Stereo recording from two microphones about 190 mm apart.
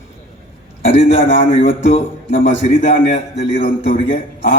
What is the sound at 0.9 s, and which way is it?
Speech, 30° left (ahead or behind).